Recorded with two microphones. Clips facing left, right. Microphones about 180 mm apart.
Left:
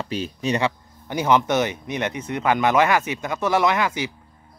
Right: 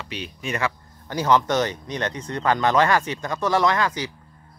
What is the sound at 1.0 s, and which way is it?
Speech, 15° left (ahead or behind).